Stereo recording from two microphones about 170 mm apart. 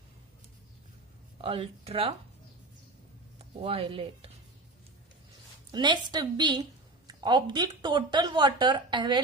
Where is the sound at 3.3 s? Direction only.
35° right (ahead or behind).